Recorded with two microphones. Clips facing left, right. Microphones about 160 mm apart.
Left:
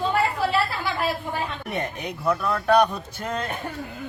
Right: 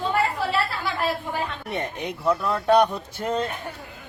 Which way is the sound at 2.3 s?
20° right (ahead or behind).